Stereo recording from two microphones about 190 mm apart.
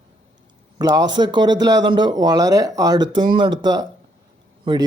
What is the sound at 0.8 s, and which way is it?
Speech, 20° right (ahead or behind).